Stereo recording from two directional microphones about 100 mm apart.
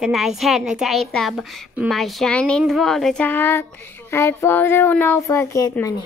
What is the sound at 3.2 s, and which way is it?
A child's voice, 20° left (ahead or behind).